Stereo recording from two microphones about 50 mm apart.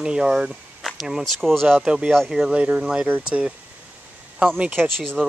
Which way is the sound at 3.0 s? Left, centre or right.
Right.